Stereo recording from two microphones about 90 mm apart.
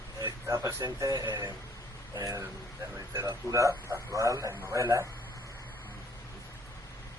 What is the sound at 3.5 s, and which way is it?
Speech, 35° right (ahead or behind).